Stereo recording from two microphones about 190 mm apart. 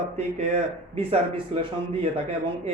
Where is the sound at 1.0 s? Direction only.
30° right (ahead or behind).